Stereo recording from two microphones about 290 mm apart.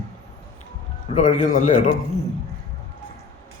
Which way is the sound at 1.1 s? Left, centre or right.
Left.